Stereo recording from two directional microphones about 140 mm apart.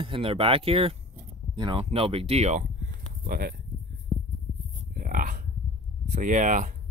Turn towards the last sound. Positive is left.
turn(degrees=-60)  # may be behind; listen again after turning